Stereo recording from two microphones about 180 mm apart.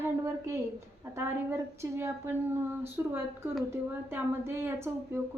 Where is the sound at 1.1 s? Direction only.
15° right (ahead or behind).